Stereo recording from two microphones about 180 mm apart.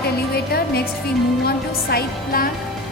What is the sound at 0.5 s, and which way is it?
Speech, 60° left (ahead or behind).